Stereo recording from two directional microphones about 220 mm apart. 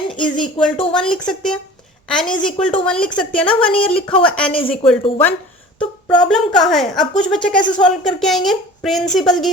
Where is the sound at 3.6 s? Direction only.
25° left (ahead or behind).